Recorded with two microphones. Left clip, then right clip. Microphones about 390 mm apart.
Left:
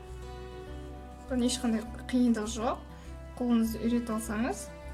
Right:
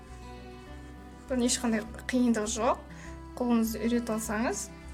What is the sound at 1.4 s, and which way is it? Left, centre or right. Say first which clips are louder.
A woman's voice: right 1 dB; centre.